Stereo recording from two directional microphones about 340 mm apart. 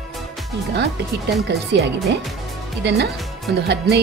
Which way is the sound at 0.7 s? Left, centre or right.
Right.